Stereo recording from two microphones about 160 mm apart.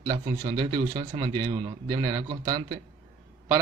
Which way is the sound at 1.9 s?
20° right (ahead or behind).